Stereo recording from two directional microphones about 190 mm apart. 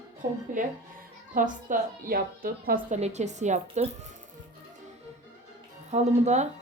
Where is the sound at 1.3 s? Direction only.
45° right (ahead or behind).